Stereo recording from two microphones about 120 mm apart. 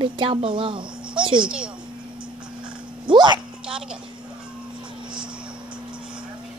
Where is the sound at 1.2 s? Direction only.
40° right (ahead or behind).